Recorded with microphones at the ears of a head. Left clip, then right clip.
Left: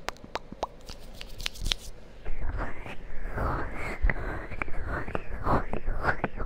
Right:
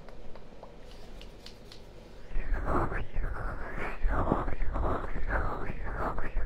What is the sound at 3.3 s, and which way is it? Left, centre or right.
Whispering, left.